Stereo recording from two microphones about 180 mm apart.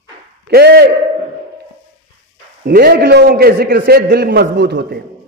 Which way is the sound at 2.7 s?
60° right (ahead or behind).